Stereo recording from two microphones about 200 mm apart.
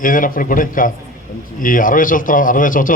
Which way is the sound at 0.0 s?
45° left (ahead or behind).